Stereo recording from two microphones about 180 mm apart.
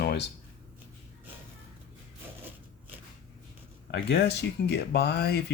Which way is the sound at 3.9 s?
70° left (ahead or behind).